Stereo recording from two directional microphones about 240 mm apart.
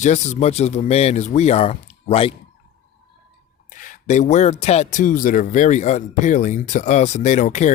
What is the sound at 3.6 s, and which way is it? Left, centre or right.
Speech, left.